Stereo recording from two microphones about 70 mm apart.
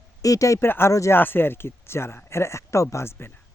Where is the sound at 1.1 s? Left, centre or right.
Left.